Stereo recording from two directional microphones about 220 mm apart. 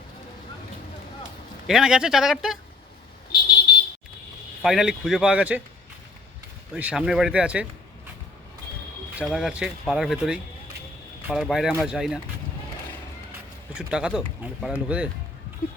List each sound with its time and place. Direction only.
1.6 s speech: centre (ahead or behind)
4.6 s speech: centre (ahead or behind)
6.7 s speech: 5° right (ahead or behind)
9.1 s speech: centre (ahead or behind)
13.7 s speech: 5° right (ahead or behind)